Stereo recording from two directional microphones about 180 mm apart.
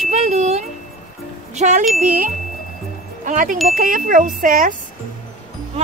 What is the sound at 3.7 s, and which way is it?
Wind chime, 50° right (ahead or behind).